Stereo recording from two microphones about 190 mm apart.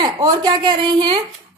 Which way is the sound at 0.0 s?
20° right (ahead or behind).